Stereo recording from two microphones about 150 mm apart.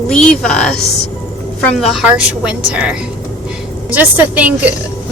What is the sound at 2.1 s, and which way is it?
A woman's voice, 10° right (ahead or behind).